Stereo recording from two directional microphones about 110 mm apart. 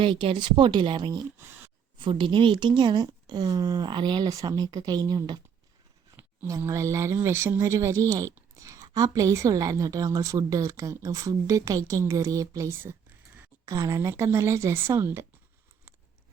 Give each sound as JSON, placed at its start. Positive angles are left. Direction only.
{"t": 0.0, "sound": "speech", "side_deg": -50}
{"t": 1.4, "sound": "a sound", "side_deg": -20}
{"t": 2.0, "sound": "a woman's voice", "side_deg": -50}
{"t": 6.6, "sound": "speech", "side_deg": -25}
{"t": 8.4, "sound": "a sound", "side_deg": -25}
{"t": 8.9, "sound": "a woman's voice", "side_deg": -35}
{"t": 13.7, "sound": "speech", "side_deg": -30}